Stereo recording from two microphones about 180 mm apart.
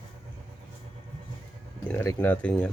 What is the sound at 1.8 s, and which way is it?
Speech, 10° left (ahead or behind).